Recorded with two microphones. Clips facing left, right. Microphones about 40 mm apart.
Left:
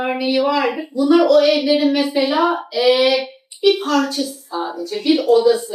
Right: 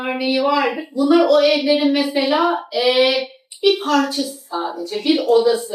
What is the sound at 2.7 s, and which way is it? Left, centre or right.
Child singing, centre.